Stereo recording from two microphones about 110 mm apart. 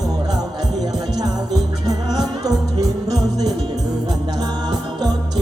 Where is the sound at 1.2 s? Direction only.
35° right (ahead or behind).